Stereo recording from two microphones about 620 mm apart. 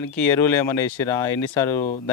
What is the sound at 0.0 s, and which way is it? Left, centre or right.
Speech, centre.